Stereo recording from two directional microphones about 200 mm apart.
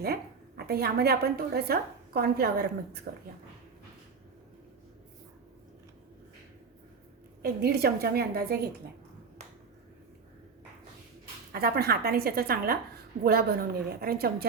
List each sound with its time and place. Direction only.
0.0 s a woman's voice: 50° right (ahead or behind)
7.4 s a woman's voice: 50° right (ahead or behind)
11.5 s a woman's voice: 50° right (ahead or behind)